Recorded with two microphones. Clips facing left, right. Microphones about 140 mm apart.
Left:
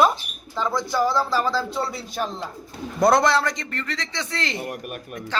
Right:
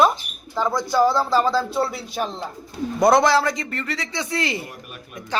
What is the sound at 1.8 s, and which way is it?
A woman's voice, 5° right (ahead or behind).